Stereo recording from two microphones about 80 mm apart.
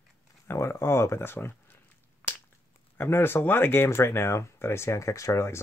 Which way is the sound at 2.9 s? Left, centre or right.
Left.